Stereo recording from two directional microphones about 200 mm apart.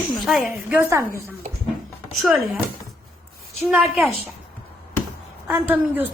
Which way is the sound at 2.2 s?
Centre (ahead or behind).